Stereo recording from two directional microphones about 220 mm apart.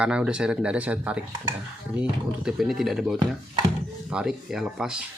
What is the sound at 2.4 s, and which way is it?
Speech, centre (ahead or behind).